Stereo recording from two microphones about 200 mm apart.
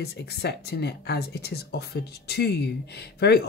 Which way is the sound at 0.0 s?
55° left (ahead or behind).